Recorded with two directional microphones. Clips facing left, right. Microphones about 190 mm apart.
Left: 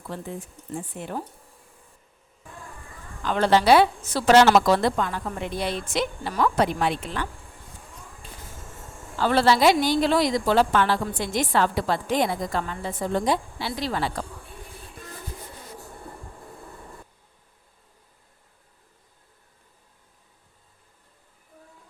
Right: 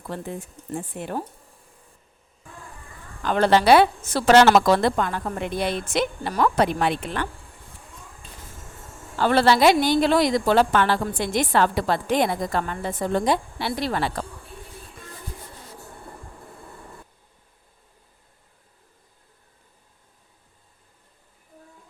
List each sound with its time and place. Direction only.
0.1 s a woman's voice: 60° right (ahead or behind)
3.2 s a woman's voice: 60° right (ahead or behind)
9.1 s a woman's voice: 60° right (ahead or behind)